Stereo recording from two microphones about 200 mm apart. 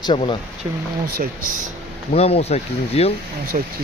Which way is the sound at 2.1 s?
30° left (ahead or behind).